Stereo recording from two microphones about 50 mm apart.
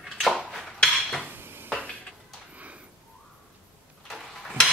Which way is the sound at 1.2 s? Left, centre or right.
Right.